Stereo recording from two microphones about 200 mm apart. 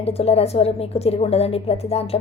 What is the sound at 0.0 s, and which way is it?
A woman's voice, 30° left (ahead or behind).